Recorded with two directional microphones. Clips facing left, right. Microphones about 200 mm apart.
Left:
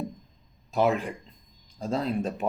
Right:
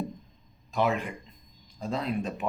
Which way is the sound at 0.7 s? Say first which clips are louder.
Left 3 dB; 40° left (ahead or behind).